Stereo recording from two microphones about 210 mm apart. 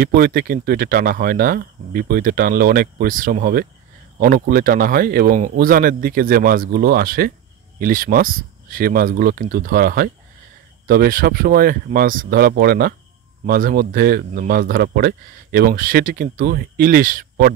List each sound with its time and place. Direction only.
0.0 s a man's voice: 45° right (ahead or behind)